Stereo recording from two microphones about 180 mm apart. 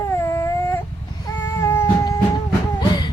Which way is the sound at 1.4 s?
15° left (ahead or behind).